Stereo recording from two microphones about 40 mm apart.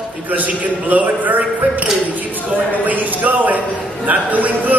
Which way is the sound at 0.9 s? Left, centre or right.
Right.